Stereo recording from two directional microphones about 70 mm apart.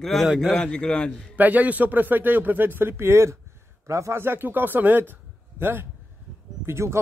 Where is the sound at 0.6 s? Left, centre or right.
Centre.